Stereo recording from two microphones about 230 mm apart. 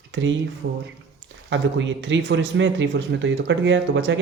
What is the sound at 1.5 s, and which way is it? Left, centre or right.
Speech, right.